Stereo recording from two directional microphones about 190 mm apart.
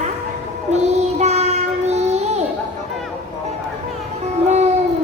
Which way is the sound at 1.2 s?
35° right (ahead or behind).